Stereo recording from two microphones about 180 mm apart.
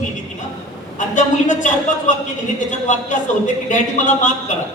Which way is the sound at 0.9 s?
45° left (ahead or behind).